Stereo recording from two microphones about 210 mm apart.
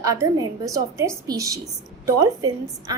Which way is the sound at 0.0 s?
15° right (ahead or behind).